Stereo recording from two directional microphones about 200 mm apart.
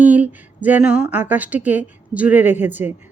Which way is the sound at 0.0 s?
10° right (ahead or behind).